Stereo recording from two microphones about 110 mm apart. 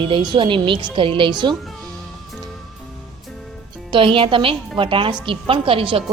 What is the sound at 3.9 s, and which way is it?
A woman's voice, 50° right (ahead or behind).